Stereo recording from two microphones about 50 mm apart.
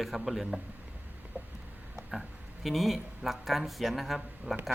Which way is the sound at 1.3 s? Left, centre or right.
Right.